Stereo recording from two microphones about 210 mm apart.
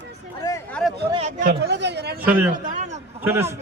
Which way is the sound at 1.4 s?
50° right (ahead or behind).